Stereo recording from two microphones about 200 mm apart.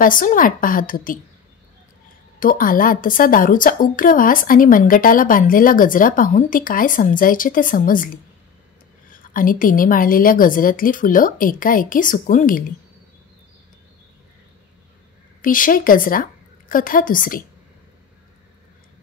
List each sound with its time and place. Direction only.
0.0 s a woman's voice: 45° left (ahead or behind)
2.4 s a woman's voice: 45° left (ahead or behind)
15.4 s a woman's voice: 45° left (ahead or behind)